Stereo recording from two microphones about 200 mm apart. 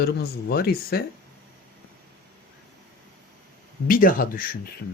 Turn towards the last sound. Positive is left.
turn(degrees=45)  # may be behind; listen again after turning